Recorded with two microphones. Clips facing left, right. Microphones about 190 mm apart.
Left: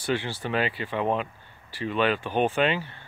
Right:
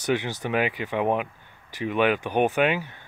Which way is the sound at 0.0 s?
15° right (ahead or behind).